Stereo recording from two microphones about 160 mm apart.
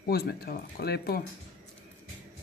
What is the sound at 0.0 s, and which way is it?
Speech, 75° left (ahead or behind).